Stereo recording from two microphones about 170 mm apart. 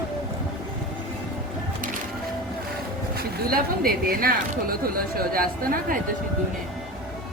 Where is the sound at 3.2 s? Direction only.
60° right (ahead or behind).